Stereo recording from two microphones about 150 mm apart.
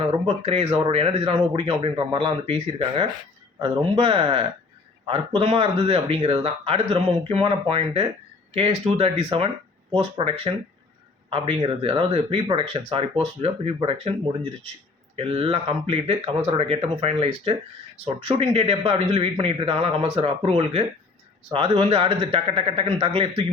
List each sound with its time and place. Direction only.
0.0 s speech: 40° right (ahead or behind)
15.1 s speech: 40° right (ahead or behind)